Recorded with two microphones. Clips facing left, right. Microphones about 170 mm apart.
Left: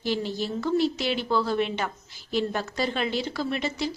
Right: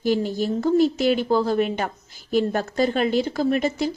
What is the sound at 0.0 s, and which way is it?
Speech, 45° right (ahead or behind).